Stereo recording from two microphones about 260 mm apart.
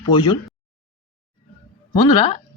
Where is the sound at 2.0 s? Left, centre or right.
Centre.